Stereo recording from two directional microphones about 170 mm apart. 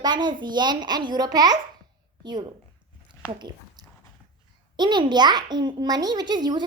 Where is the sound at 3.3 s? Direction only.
25° right (ahead or behind).